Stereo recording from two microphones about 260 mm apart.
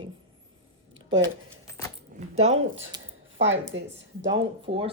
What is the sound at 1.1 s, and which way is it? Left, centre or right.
Speech, right.